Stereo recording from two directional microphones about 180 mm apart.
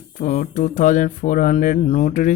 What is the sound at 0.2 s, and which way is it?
Speech, 45° left (ahead or behind).